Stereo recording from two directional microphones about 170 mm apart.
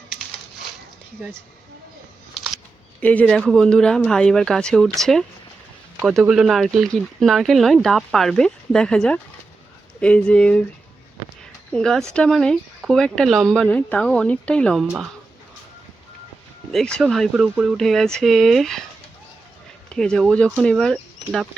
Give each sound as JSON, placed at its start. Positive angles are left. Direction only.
{"t": 3.0, "sound": "speech", "side_deg": 10}
{"t": 11.7, "sound": "speech", "side_deg": 5}
{"t": 16.7, "sound": "speech", "side_deg": 5}
{"t": 19.9, "sound": "speech", "side_deg": 5}